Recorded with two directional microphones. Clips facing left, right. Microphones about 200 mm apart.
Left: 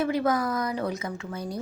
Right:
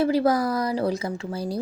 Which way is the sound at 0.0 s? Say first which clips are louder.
Right 4 dB; 35° right (ahead or behind).